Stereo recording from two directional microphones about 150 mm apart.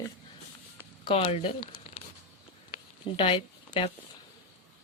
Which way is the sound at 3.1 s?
35° left (ahead or behind).